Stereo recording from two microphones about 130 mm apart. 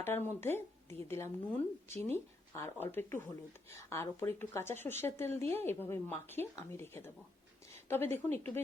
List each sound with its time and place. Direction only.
0.0 s a woman's voice: 15° left (ahead or behind)